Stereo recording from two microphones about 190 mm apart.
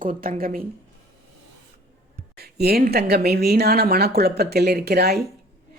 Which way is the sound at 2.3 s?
55° right (ahead or behind).